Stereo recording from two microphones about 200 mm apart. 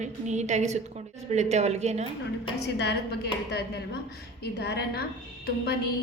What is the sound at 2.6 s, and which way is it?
A woman's voice, 55° left (ahead or behind).